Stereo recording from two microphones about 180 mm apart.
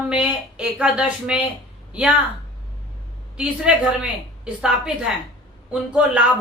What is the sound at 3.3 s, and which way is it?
A woman's voice, 5° right (ahead or behind).